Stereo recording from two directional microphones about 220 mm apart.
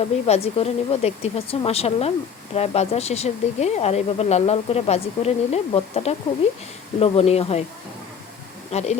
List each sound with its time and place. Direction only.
0.0 s speech: 30° left (ahead or behind)
8.7 s speech: 30° left (ahead or behind)